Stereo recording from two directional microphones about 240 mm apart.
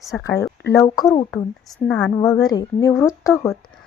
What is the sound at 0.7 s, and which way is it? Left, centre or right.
Speech, centre.